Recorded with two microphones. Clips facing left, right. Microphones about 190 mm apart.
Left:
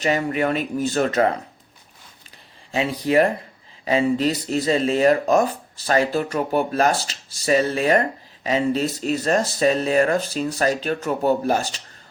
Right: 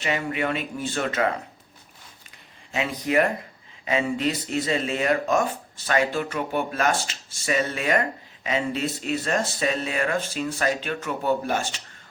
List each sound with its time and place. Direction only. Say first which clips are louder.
0.0 s speech: left 5 dB; 40° left (ahead or behind)
2.7 s speech: left 4 dB; 30° left (ahead or behind)